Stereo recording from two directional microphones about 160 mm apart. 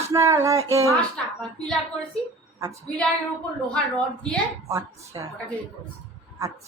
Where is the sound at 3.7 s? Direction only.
5° left (ahead or behind).